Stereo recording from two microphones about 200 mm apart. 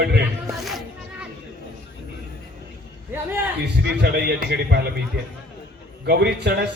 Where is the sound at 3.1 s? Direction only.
10° right (ahead or behind).